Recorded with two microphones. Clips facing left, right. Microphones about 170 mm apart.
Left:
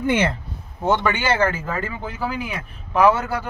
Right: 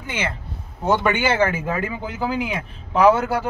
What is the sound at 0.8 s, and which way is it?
Speech, 10° right (ahead or behind).